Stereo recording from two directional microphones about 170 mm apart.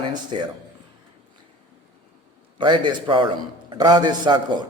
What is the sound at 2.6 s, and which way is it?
A man's voice, 30° right (ahead or behind).